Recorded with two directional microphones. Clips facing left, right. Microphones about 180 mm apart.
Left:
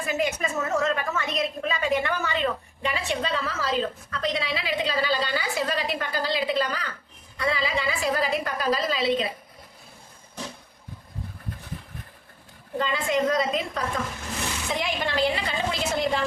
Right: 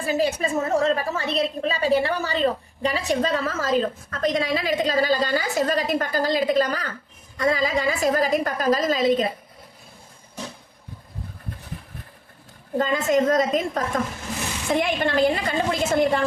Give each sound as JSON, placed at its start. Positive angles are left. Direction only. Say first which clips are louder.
{"t": 0.0, "sound": "a woman's voice", "louder": "right 4 dB", "side_deg": -30}
{"t": 12.8, "sound": "a woman's voice", "louder": "right 4 dB", "side_deg": -45}